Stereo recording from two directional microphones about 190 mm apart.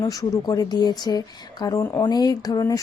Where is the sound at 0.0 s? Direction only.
20° left (ahead or behind).